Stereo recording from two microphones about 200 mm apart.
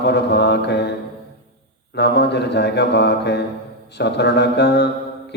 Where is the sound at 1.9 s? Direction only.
55° left (ahead or behind).